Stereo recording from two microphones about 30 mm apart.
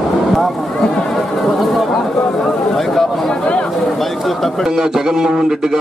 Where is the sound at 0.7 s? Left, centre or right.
Left.